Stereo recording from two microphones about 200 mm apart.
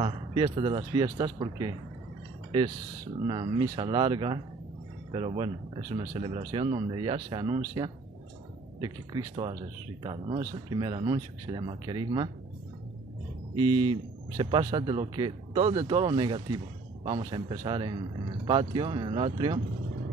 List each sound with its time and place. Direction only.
0.0 s speech: 25° right (ahead or behind)
3.3 s speech: 25° right (ahead or behind)
14.3 s speech: 25° right (ahead or behind)